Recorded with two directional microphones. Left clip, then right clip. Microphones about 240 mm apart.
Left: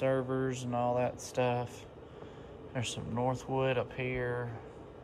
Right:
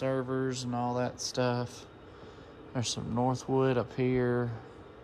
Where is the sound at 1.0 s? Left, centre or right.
Centre.